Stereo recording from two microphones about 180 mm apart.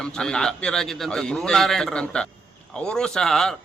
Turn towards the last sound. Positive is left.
turn(degrees=0)  # may be behind; listen again after turning